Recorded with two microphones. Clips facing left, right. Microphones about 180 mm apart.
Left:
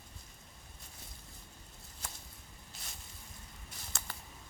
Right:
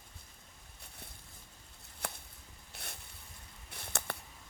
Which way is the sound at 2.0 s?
60° right (ahead or behind).